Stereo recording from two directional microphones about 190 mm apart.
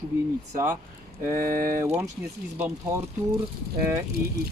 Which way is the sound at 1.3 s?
45° right (ahead or behind).